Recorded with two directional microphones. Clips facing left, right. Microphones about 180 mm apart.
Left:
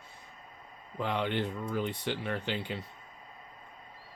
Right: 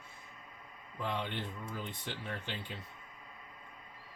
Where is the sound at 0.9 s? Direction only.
75° left (ahead or behind).